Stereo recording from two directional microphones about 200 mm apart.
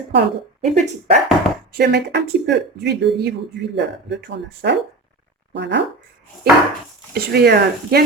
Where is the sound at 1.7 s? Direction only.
55° right (ahead or behind).